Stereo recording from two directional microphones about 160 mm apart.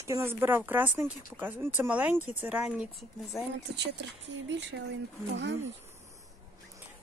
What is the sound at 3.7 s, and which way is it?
Speech, 90° right.